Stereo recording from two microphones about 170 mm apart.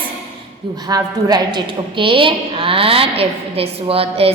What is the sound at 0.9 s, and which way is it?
A woman's voice, 20° right (ahead or behind).